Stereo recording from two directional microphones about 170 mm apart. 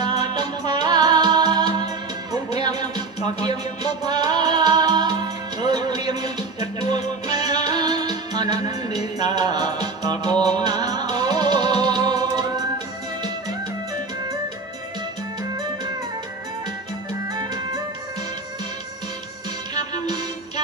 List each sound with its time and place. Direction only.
0.0 s music: 25° right (ahead or behind)
3.2 s music: 40° left (ahead or behind)
4.0 s music: 25° right (ahead or behind)
19.7 s music: 25° right (ahead or behind)